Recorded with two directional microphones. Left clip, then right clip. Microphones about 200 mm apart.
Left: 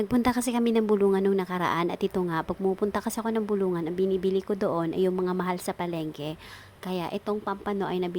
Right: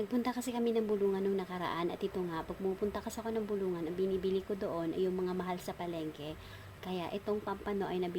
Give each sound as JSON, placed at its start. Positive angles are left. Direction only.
{"t": 0.1, "sound": "a woman's voice", "side_deg": 35}